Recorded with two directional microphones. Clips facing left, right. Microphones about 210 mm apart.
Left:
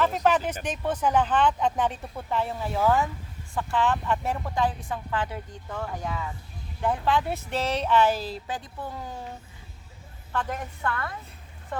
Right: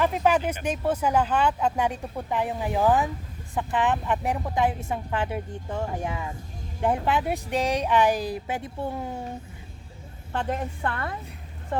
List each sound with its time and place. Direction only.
0.0 s a woman's voice: 10° right (ahead or behind)
10.3 s a woman's voice: 30° right (ahead or behind)